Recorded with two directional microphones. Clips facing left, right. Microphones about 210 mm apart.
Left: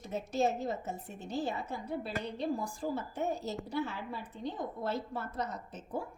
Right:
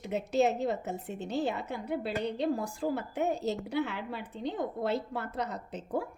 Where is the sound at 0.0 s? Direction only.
70° right (ahead or behind).